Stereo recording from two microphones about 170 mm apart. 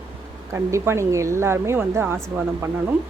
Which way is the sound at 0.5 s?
15° right (ahead or behind).